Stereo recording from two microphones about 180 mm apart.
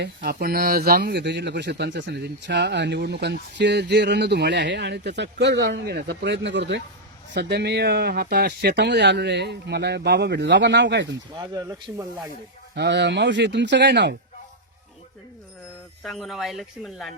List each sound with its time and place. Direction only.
0.0 s speech: 65° right (ahead or behind)
7.3 s speech: 65° right (ahead or behind)
11.3 s speech: 20° right (ahead or behind)
12.7 s speech: 70° right (ahead or behind)
16.0 s speech: centre (ahead or behind)